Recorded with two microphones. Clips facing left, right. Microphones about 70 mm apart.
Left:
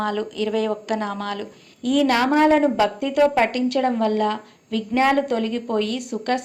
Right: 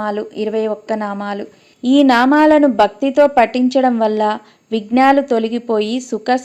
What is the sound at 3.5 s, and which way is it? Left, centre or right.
Speech, left.